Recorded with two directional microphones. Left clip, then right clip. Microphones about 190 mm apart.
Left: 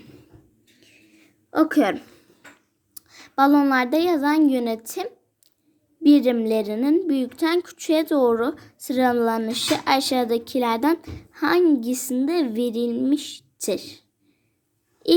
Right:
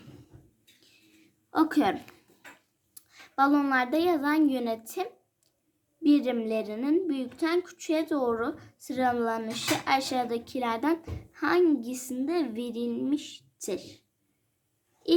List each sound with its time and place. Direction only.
1.5 s a woman's voice: 15° left (ahead or behind)
2.9 s a woman's voice: 35° left (ahead or behind)